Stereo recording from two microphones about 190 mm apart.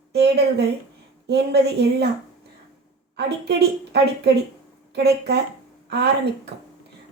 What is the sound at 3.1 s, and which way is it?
A woman's voice, 60° right (ahead or behind).